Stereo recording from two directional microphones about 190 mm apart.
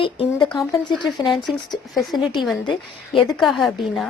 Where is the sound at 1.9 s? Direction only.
Centre (ahead or behind).